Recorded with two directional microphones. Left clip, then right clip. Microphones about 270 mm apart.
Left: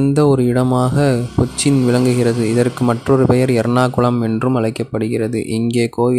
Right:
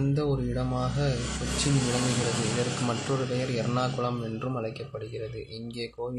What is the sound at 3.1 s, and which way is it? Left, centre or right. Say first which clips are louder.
A man's voice: left 16 dB; left.